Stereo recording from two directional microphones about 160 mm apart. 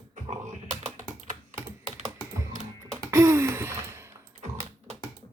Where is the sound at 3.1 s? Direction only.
20° right (ahead or behind).